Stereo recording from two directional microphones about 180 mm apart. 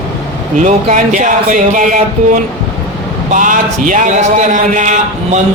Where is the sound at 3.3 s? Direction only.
45° right (ahead or behind).